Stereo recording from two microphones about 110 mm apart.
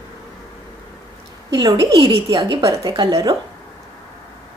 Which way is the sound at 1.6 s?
35° right (ahead or behind).